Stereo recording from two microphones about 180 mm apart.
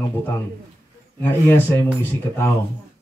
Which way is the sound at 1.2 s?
10° left (ahead or behind).